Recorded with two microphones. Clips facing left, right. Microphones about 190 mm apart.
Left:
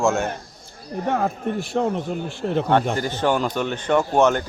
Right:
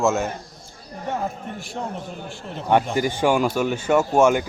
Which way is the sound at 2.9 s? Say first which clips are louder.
Right 2 dB; 10° right (ahead or behind).